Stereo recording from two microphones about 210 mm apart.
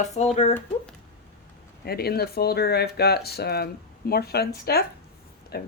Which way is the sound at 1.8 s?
50° left (ahead or behind).